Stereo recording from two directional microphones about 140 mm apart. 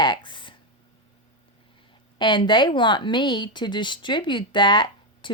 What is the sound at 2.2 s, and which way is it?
Speech, 35° left (ahead or behind).